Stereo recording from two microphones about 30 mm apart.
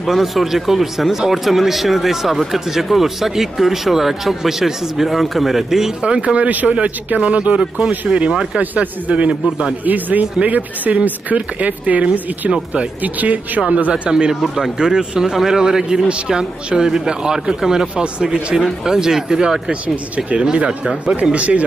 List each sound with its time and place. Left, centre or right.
0.0 s speech: centre
1.1 s speech: centre
1.4 s speech: centre
6.0 s speech: right
6.3 s speech: right
7.2 s speech: right
8.1 s speech: centre
8.5 s speech: right
9.8 s speech: right
13.0 s speech: right
13.7 s speech: right
14.4 s speech: centre
17.9 s speech: right
20.5 s speech: right